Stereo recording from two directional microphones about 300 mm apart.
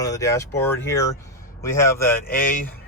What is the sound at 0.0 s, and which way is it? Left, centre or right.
Speech, centre.